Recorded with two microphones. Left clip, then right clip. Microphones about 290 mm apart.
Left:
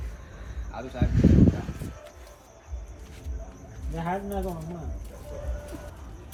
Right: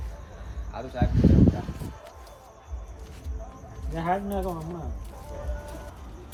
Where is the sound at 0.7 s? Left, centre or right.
Centre.